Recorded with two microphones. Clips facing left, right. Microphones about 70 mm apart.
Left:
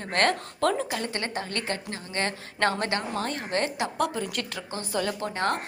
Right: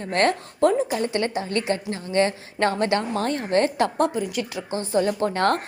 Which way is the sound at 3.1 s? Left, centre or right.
Right.